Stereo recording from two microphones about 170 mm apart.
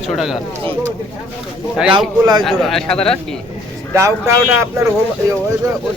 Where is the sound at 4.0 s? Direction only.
15° right (ahead or behind).